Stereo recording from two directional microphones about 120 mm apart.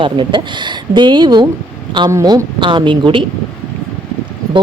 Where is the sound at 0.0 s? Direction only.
40° right (ahead or behind).